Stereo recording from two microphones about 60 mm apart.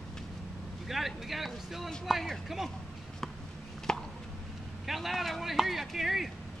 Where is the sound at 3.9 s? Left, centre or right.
Centre.